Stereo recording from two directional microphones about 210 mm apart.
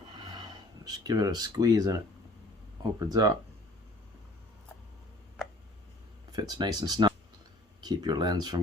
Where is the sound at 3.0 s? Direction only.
15° right (ahead or behind).